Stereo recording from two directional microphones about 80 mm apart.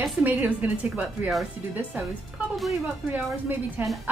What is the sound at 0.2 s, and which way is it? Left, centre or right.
A woman's voice, right.